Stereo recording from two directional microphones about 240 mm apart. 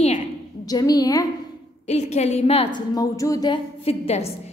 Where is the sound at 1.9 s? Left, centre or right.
Left.